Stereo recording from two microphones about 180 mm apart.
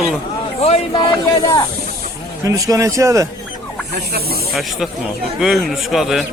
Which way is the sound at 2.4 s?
20° right (ahead or behind).